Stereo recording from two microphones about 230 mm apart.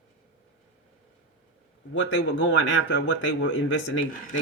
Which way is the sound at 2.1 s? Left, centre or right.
Left.